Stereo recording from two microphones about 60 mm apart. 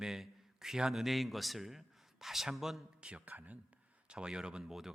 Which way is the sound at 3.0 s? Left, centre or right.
Right.